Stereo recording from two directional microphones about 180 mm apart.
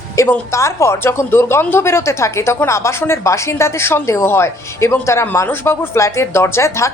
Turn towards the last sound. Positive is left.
turn(degrees=15)  # may be behind; listen again after turning